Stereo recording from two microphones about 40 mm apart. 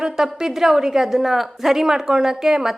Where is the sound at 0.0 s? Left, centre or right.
Centre.